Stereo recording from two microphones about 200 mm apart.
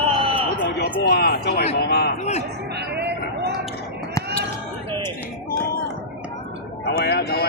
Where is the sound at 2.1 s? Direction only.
35° left (ahead or behind).